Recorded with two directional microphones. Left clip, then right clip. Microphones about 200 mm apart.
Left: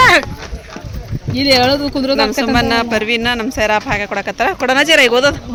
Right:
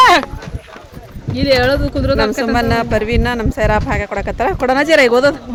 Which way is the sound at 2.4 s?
10° right (ahead or behind).